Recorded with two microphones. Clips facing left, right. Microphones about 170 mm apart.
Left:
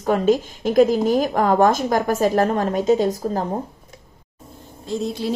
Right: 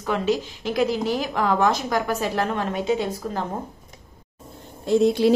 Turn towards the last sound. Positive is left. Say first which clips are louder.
# right 7 dB
turn(degrees=-70)  # may be behind; listen again after turning